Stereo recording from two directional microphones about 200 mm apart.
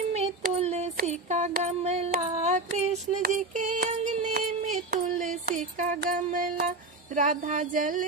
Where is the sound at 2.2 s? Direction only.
35° right (ahead or behind).